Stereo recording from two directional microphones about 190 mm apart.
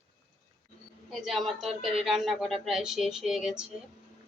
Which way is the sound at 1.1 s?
Centre (ahead or behind).